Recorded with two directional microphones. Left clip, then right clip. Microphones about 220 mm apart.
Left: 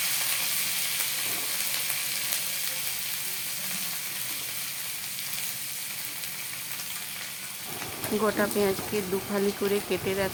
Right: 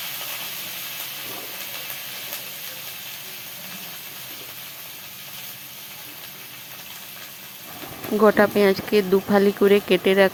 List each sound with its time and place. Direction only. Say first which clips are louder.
8.2 s speech: right 10 dB; 25° right (ahead or behind)